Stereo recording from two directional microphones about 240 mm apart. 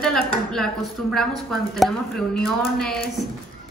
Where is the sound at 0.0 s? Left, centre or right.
Centre.